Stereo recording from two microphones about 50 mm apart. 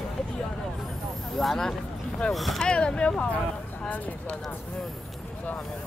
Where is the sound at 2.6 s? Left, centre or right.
Centre.